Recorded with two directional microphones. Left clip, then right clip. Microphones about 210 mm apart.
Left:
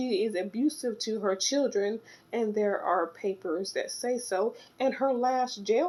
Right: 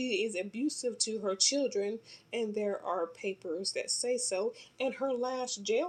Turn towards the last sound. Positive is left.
turn(degrees=-30)  # may be behind; listen again after turning